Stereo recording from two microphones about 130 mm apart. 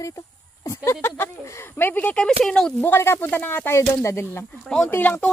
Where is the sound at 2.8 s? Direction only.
15° left (ahead or behind).